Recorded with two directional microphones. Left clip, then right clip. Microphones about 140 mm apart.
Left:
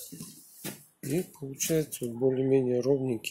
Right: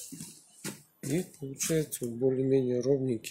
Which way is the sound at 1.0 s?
5° right (ahead or behind).